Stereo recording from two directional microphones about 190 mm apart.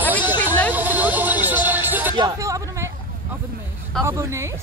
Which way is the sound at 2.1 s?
20° right (ahead or behind).